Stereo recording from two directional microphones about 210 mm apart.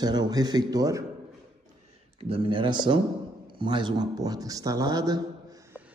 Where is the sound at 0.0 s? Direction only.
20° right (ahead or behind).